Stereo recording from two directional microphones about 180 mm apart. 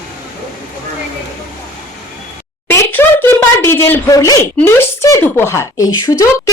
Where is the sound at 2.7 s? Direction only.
15° left (ahead or behind).